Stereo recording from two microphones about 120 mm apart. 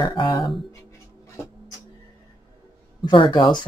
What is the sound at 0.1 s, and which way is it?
Speech, 35° left (ahead or behind).